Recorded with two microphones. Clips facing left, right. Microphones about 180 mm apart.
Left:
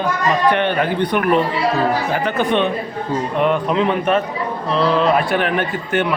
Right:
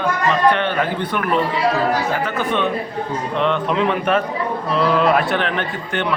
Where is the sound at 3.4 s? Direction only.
5° left (ahead or behind).